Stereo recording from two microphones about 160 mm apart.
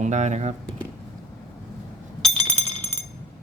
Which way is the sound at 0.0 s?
45° right (ahead or behind).